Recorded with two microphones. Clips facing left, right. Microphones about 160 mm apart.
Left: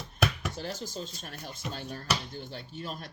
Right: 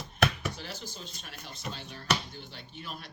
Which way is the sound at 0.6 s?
45° left (ahead or behind).